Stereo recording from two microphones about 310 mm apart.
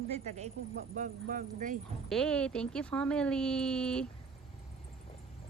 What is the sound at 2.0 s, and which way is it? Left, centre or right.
Speech, centre.